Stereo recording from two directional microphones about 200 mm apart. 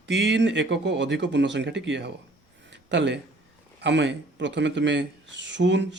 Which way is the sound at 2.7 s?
60° right (ahead or behind).